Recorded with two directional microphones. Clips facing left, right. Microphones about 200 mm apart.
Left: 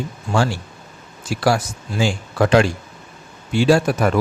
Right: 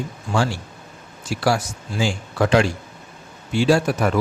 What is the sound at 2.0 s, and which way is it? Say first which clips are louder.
Speech: left 2 dB; 60° left (ahead or behind).